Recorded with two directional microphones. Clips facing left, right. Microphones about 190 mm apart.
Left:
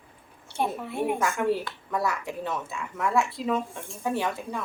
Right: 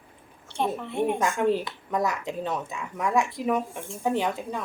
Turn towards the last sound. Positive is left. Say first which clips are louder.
# right 2 dB
turn(degrees=-20)  # may be behind; listen again after turning